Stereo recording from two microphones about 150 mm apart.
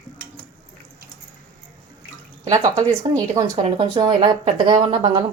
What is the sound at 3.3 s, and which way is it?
Speech, 25° right (ahead or behind).